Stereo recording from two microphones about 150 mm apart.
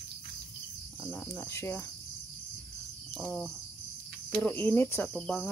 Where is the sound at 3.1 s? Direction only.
5° left (ahead or behind).